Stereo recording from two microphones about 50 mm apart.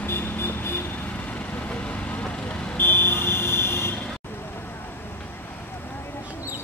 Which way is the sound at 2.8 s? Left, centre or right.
Left.